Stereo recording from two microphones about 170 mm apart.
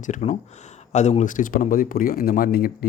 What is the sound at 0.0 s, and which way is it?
Speech, 45° left (ahead or behind).